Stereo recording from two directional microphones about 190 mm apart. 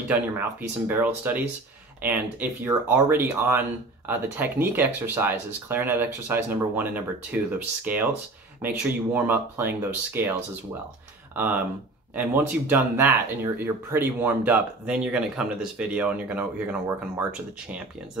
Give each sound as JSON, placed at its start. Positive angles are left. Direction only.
{"t": 0.1, "sound": "speech", "side_deg": -10}